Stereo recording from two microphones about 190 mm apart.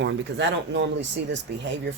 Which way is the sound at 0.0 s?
65° right (ahead or behind).